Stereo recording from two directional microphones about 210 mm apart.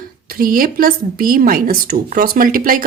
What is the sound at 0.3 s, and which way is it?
Speech, 45° right (ahead or behind).